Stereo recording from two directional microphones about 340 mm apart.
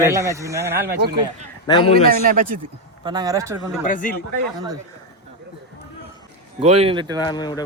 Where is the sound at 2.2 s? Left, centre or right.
Right.